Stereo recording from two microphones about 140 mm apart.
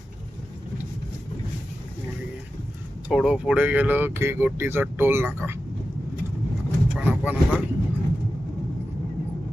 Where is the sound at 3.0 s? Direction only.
5° right (ahead or behind).